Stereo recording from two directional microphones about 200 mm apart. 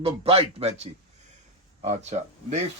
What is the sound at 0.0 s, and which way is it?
A man's voice, 30° right (ahead or behind).